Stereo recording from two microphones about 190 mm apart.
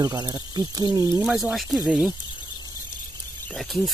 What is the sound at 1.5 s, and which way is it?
Speech, centre (ahead or behind).